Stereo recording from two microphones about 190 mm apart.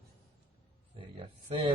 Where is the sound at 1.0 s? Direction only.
30° right (ahead or behind).